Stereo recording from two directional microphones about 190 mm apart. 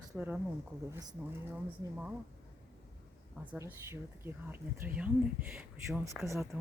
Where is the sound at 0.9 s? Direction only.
20° right (ahead or behind).